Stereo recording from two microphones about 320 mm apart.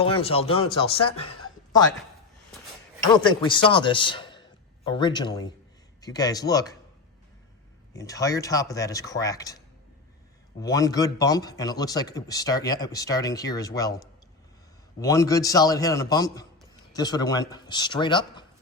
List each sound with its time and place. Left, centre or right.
0.0 s a man's voice: centre
3.2 s a man's voice: centre
7.9 s a man's voice: centre
10.6 s a man's voice: centre
15.0 s a man's voice: centre